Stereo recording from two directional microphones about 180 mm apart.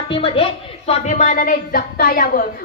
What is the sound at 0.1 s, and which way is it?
Speech, 30° left (ahead or behind).